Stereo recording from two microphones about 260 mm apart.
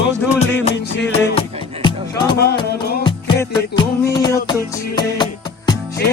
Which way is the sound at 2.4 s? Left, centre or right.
Left.